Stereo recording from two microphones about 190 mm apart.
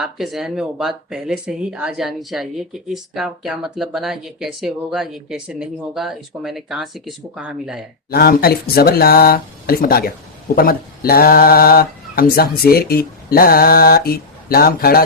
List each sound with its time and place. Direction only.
0.0 s speech: centre (ahead or behind)
8.1 s speech: 55° left (ahead or behind)